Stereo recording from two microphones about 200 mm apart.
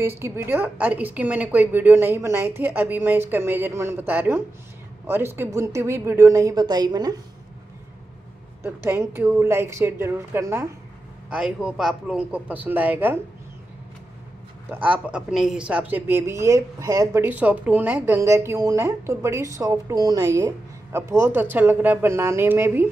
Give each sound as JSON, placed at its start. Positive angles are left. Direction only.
{"t": 0.0, "sound": "a woman's voice", "side_deg": -10}
{"t": 8.6, "sound": "a woman's voice", "side_deg": -10}
{"t": 14.7, "sound": "a woman's voice", "side_deg": -5}